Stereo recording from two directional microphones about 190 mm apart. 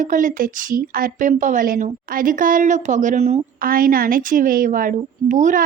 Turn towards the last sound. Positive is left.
turn(degrees=-40)  # may be behind; listen again after turning